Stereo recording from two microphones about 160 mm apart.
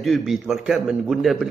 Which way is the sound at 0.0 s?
Centre (ahead or behind).